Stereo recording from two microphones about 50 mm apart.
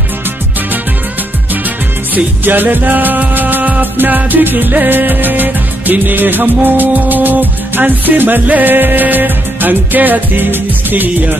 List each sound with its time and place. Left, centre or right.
2.1 s music: right